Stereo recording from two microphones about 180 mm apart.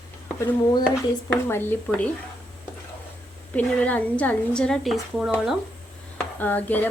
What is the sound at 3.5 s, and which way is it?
Speech, 10° left (ahead or behind).